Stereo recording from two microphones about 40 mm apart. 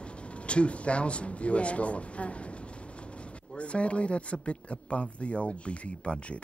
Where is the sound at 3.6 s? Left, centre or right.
Left.